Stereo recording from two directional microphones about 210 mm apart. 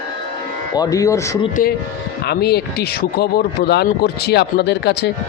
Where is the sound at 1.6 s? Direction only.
40° left (ahead or behind).